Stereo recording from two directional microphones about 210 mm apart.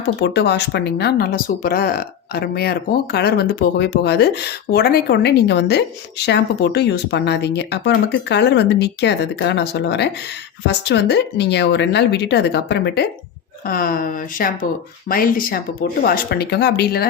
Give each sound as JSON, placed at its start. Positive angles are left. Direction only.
{"t": 0.2, "sound": "speech", "side_deg": 55}